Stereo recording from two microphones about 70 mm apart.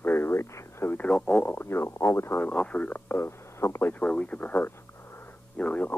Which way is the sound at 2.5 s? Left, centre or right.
Centre.